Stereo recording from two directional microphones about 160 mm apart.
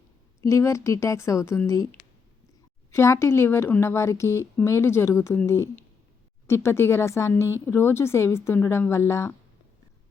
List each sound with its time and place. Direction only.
0.4 s a woman's voice: 20° left (ahead or behind)